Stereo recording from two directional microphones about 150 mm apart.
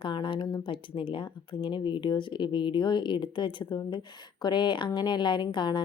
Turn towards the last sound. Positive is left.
turn(degrees=30)  # may be behind; listen again after turning